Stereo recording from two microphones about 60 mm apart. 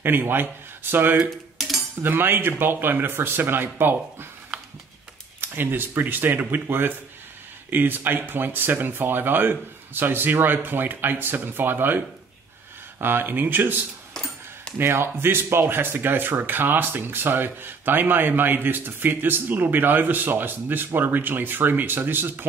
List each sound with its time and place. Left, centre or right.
0.0 s speech: right
5.4 s speech: right
13.0 s speech: right
14.1 s a sound: centre
14.8 s speech: right